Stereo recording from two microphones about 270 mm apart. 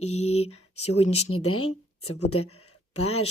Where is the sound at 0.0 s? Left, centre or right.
Left.